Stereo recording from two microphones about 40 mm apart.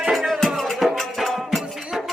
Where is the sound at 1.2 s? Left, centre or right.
Centre.